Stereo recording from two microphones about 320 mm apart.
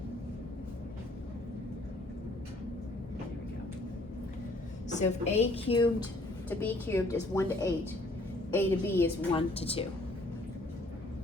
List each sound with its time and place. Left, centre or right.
4.9 s a woman's voice: left
6.5 s a woman's voice: centre
9.6 s a woman's voice: centre